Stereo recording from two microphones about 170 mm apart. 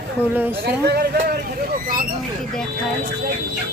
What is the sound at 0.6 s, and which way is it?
Speech, 75° right (ahead or behind).